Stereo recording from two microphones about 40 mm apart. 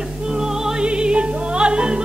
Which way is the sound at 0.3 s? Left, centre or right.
Centre.